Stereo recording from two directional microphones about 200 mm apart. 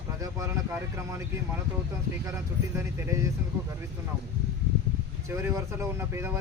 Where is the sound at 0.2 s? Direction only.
15° right (ahead or behind).